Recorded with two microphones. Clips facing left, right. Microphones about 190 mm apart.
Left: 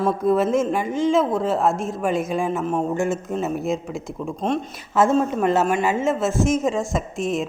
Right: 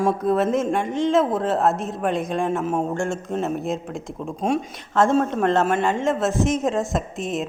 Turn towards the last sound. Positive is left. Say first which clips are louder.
# left 2 dB
turn(degrees=0)  # may be behind; listen again after turning